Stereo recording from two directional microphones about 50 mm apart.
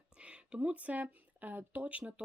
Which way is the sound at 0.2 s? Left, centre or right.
Right.